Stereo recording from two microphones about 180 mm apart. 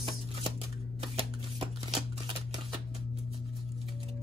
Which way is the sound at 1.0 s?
30° right (ahead or behind).